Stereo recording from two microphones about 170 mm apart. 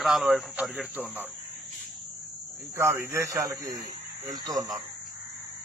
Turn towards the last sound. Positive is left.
turn(degrees=-20)  # may be behind; listen again after turning